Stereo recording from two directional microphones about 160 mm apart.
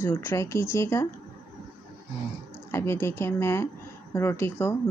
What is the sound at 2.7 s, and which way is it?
A woman's voice, 15° left (ahead or behind).